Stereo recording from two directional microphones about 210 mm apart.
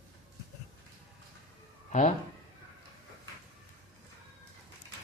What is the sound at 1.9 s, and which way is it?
Speech, 35° left (ahead or behind).